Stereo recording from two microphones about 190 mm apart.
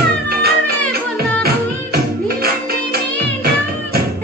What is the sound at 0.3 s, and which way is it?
Music, 55° right (ahead or behind).